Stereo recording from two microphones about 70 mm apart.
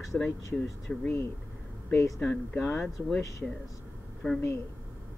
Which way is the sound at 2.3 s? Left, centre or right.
Left.